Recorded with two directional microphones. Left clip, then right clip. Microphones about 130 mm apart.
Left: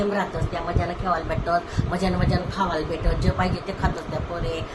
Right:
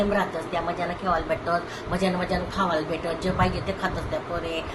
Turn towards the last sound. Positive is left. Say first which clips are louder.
# right 1 dB
turn(degrees=15)  # may be behind; listen again after turning